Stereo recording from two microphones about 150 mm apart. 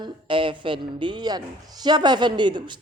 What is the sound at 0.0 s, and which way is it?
A woman's voice, 35° right (ahead or behind).